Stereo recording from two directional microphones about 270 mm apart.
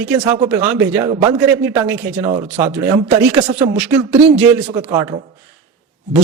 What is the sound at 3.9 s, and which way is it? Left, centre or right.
Speech, centre.